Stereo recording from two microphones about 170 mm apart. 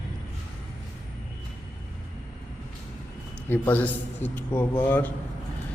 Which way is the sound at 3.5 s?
10° left (ahead or behind).